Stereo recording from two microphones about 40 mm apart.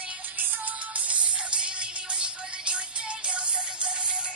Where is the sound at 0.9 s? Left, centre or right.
Right.